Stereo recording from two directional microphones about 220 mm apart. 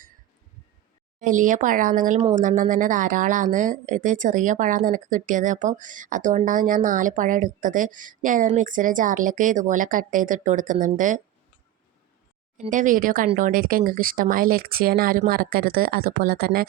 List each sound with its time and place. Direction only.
1.2 s a woman's voice: 35° right (ahead or behind)
12.5 s a woman's voice: 35° right (ahead or behind)